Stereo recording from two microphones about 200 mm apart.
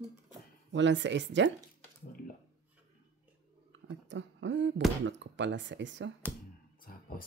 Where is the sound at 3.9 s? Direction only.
65° right (ahead or behind).